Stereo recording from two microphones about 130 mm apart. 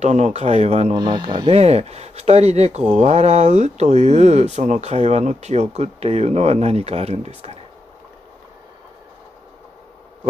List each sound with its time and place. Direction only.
0.0 s speech: 60° right (ahead or behind)
0.9 s speech: 35° right (ahead or behind)
1.6 s speech: 55° right (ahead or behind)